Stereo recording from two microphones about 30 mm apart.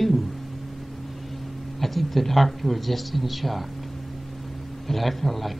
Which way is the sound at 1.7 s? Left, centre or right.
Centre.